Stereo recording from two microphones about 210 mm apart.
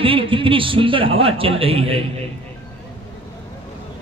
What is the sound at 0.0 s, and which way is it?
A man's voice, 25° right (ahead or behind).